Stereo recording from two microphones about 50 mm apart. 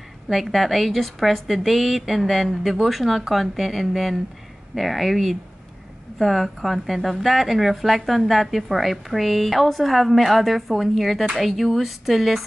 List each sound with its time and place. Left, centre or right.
0.3 s a woman's voice: centre